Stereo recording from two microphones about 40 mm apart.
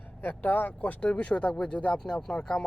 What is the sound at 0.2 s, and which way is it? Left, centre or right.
Speech, left.